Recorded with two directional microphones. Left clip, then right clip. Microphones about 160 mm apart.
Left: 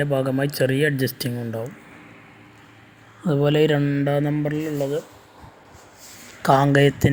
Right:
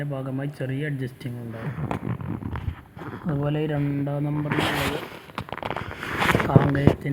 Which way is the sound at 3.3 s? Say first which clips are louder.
Left 9 dB; 35° left (ahead or behind).